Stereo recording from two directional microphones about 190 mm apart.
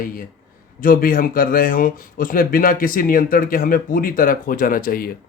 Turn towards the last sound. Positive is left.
turn(degrees=50)  # may be behind; listen again after turning